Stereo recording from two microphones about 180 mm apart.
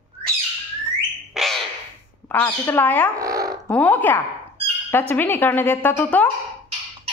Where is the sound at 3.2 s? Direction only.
20° right (ahead or behind).